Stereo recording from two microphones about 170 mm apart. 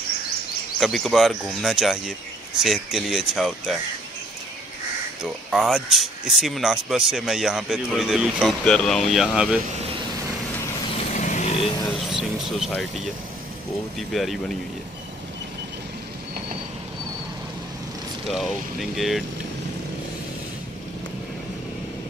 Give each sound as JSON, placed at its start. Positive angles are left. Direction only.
{"t": 0.7, "sound": "speech", "side_deg": 0}
{"t": 5.2, "sound": "speech", "side_deg": 0}
{"t": 11.1, "sound": "vehicle", "side_deg": 45}
{"t": 12.0, "sound": "speech", "side_deg": 0}
{"t": 18.3, "sound": "speech", "side_deg": 0}